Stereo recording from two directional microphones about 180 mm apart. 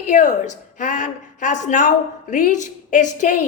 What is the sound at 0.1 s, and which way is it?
A woman's voice, 45° left (ahead or behind).